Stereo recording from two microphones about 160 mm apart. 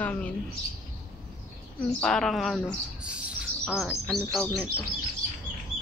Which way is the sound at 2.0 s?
5° left (ahead or behind).